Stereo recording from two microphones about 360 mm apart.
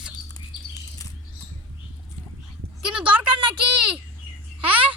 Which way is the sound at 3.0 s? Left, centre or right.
Centre.